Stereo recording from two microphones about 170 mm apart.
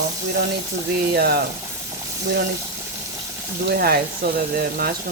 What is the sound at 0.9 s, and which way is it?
Speech, 65° right (ahead or behind).